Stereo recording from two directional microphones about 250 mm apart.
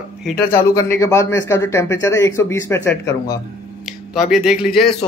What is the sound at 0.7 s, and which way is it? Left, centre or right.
Speech, centre.